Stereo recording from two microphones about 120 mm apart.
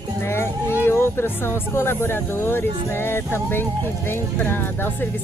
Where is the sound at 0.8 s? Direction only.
20° left (ahead or behind).